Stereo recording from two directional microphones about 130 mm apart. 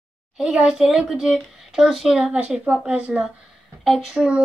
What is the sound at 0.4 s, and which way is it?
Speech, 5° right (ahead or behind).